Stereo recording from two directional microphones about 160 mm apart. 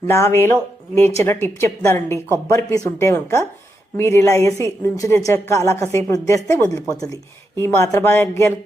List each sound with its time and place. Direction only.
0.1 s speech: 15° left (ahead or behind)